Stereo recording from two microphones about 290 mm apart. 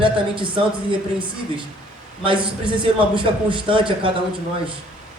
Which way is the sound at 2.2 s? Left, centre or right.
Centre.